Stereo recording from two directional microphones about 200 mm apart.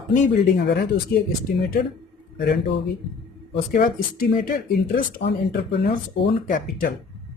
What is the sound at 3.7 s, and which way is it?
Speech, 45° left (ahead or behind).